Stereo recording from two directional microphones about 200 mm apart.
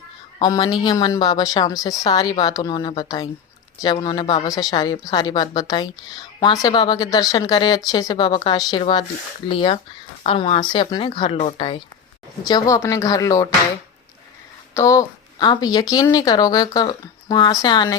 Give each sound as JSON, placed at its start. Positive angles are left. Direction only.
{"t": 0.3, "sound": "speech", "side_deg": 20}
{"t": 14.7, "sound": "speech", "side_deg": 15}